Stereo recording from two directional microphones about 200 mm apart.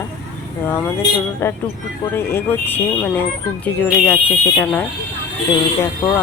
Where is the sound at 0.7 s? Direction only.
10° left (ahead or behind).